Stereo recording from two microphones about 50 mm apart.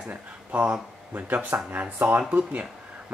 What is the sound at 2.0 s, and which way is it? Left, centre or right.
Speech, right.